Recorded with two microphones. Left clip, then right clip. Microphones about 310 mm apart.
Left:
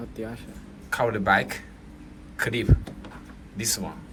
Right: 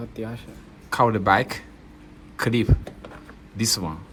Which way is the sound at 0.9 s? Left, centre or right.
Centre.